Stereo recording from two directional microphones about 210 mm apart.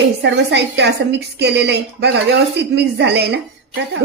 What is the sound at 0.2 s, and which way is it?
A woman's voice, 55° right (ahead or behind).